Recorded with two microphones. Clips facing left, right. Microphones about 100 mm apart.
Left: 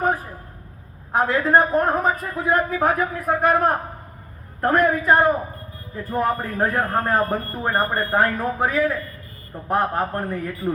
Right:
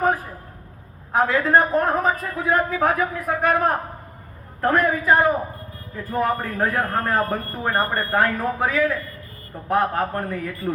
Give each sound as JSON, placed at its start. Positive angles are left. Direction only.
{"t": 1.2, "sound": "a man's voice", "side_deg": 15}
{"t": 4.8, "sound": "a man's voice", "side_deg": 20}